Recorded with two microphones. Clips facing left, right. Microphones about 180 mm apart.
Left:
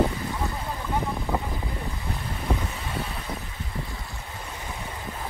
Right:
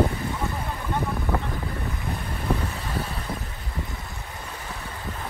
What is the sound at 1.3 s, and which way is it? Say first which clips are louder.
Boat: even; 15° left (ahead or behind).